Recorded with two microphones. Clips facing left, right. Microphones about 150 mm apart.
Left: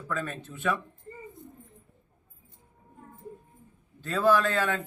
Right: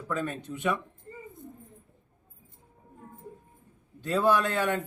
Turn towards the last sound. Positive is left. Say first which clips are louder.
# left 1 dB
turn(degrees=-15)  # may be behind; listen again after turning